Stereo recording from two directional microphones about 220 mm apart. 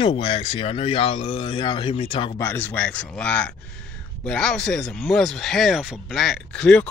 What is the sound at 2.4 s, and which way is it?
Speech, 10° left (ahead or behind).